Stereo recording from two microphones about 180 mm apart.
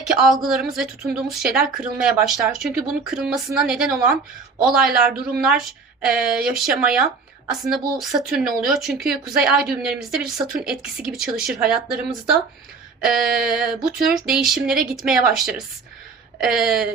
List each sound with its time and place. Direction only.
0.0 s a woman's voice: centre (ahead or behind)
13.0 s a woman's voice: 5° right (ahead or behind)